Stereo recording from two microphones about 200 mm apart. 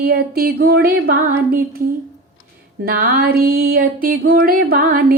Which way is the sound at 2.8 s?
50° right (ahead or behind).